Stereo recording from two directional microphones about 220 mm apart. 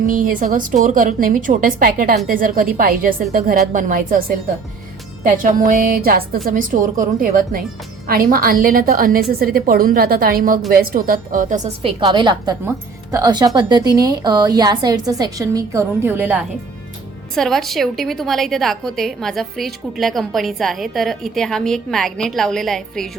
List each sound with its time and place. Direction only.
0.1 s a woman's voice: 40° right (ahead or behind)
5.2 s a woman's voice: 35° right (ahead or behind); by 16.5 s 10° right (ahead or behind)
17.3 s a woman's voice: centre (ahead or behind)